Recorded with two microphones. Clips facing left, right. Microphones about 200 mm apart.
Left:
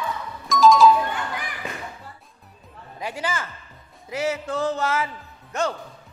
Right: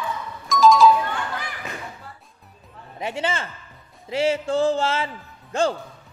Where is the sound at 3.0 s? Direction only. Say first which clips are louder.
Right 3 dB; 25° right (ahead or behind).